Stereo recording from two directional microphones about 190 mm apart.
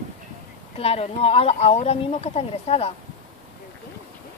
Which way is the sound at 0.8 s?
30° left (ahead or behind).